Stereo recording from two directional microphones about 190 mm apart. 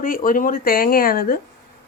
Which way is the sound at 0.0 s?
45° left (ahead or behind).